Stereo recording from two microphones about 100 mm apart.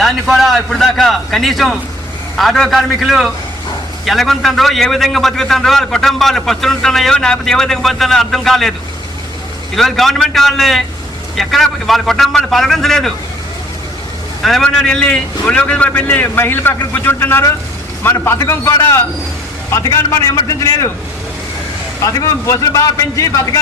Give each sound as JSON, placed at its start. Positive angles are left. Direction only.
{"t": 0.0, "sound": "a man's voice", "side_deg": 0}
{"t": 9.7, "sound": "a man's voice", "side_deg": 0}
{"t": 14.4, "sound": "a man's voice", "side_deg": 5}
{"t": 22.0, "sound": "a man's voice", "side_deg": 35}